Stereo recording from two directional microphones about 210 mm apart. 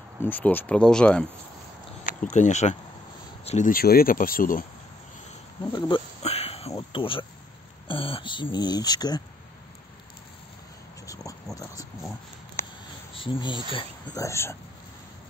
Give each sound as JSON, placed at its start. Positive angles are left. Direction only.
{"t": 0.2, "sound": "speech", "side_deg": 10}
{"t": 2.0, "sound": "speech", "side_deg": 35}
{"t": 5.8, "sound": "a sound", "side_deg": 25}
{"t": 6.7, "sound": "speech", "side_deg": 25}
{"t": 11.5, "sound": "speech", "side_deg": 15}
{"t": 13.1, "sound": "speech", "side_deg": 25}